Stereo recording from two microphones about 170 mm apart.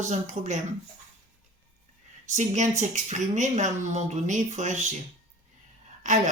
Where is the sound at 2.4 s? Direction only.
45° right (ahead or behind).